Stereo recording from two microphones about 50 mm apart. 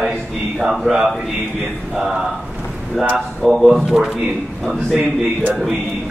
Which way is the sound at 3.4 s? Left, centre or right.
Centre.